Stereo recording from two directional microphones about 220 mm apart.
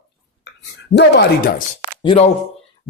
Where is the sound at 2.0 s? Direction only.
30° left (ahead or behind).